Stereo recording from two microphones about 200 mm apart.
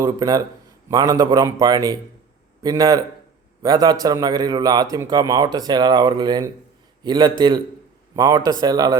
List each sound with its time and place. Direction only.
0.0 s a man's voice: 20° right (ahead or behind)